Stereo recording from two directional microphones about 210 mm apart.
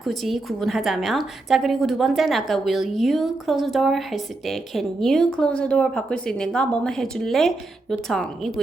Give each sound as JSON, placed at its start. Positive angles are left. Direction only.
{"t": 0.0, "sound": "a woman's voice", "side_deg": 0}